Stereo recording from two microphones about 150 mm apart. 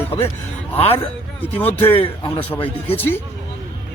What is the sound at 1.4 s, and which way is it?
Speech, 10° left (ahead or behind).